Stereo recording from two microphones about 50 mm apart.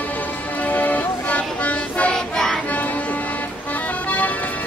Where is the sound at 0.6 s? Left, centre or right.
Left.